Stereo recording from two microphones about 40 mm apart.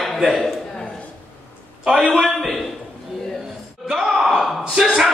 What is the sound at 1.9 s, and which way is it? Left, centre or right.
Speech, centre.